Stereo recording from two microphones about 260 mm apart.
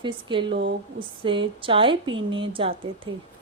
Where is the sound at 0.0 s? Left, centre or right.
Centre.